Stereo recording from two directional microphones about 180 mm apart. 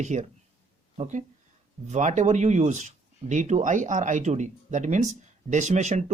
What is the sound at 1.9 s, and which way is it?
Speech, 40° right (ahead or behind).